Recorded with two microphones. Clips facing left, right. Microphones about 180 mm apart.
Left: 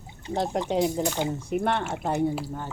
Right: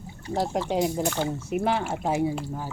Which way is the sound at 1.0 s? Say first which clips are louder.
Even; 15° left (ahead or behind).